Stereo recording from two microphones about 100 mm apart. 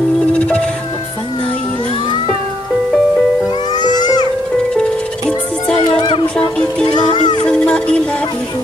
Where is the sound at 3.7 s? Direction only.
45° left (ahead or behind).